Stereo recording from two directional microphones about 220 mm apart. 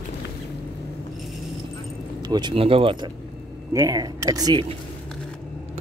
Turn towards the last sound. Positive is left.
turn(degrees=-15)  # may be behind; listen again after turning